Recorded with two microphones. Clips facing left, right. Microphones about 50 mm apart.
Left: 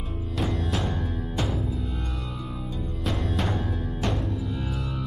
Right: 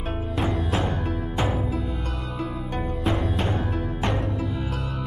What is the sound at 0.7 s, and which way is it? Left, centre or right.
Music, right.